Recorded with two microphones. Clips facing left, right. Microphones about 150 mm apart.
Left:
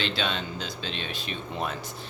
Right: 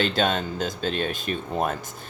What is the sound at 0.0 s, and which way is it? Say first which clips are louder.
Speech: right 6 dB; 45° right (ahead or behind).